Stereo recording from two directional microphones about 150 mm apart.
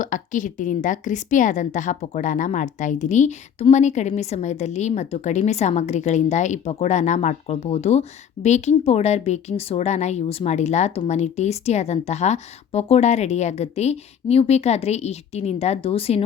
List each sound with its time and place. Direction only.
0.0 s a woman's voice: 60° left (ahead or behind); by 16.2 s 40° left (ahead or behind)